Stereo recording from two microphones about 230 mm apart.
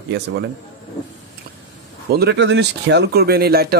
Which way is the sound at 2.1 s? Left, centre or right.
Right.